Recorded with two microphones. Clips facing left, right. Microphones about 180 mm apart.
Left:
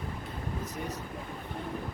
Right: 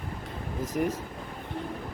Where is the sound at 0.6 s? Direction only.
90° right.